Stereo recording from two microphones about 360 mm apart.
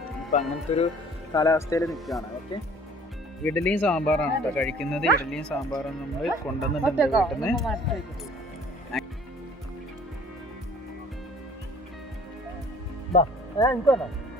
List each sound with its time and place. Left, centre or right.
0.3 s speech: centre
3.4 s speech: centre
8.9 s music: centre
13.1 s speech: centre